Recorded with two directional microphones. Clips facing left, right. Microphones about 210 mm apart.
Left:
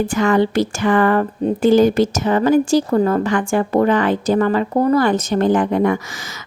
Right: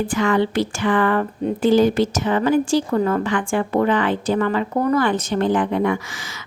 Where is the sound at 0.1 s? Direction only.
45° left (ahead or behind).